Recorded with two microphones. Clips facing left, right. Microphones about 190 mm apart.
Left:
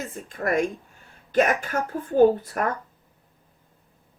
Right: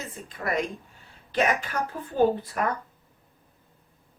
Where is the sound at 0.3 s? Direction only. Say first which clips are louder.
Left 5 dB; 45° left (ahead or behind).